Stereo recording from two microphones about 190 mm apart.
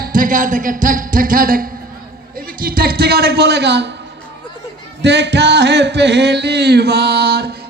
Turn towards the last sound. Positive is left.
turn(degrees=-60)  # may be behind; listen again after turning